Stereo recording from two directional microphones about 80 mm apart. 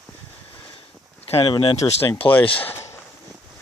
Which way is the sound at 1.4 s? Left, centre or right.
Left.